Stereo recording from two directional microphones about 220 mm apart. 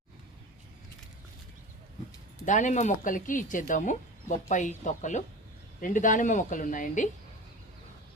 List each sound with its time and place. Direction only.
2.4 s speech: 35° left (ahead or behind)